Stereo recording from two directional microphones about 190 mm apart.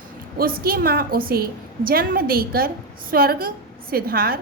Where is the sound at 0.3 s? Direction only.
50° right (ahead or behind).